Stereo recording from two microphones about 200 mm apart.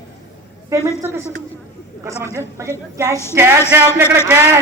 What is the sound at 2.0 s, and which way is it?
A man's voice, 15° right (ahead or behind).